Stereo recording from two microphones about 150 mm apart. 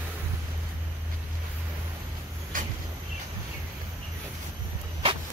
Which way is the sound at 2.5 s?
65° right (ahead or behind).